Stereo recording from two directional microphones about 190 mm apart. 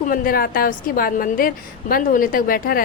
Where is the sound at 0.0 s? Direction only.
50° left (ahead or behind).